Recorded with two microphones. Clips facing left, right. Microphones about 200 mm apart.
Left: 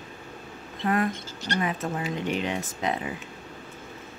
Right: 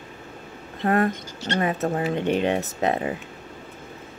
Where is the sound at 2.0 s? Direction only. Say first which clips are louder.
Right 6 dB; 60° right (ahead or behind).